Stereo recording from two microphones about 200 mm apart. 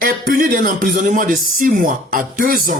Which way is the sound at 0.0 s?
45° right (ahead or behind).